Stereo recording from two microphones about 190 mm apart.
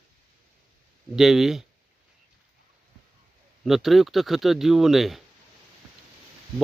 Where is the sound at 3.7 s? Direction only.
Centre (ahead or behind).